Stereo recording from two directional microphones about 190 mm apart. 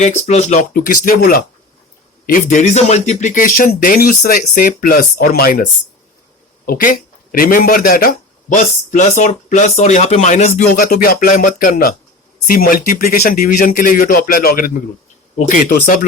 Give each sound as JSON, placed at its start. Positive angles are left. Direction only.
{"t": 0.0, "sound": "speech", "side_deg": 35}
{"t": 0.6, "sound": "speech", "side_deg": 50}
{"t": 2.7, "sound": "speech", "side_deg": 35}
{"t": 6.7, "sound": "speech", "side_deg": 50}
{"t": 10.8, "sound": "speech", "side_deg": 50}